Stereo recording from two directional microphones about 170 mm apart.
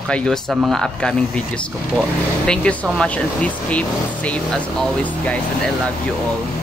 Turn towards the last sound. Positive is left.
turn(degrees=10)  # may be behind; listen again after turning